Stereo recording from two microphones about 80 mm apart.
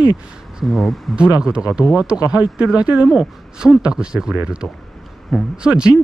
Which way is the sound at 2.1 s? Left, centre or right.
Left.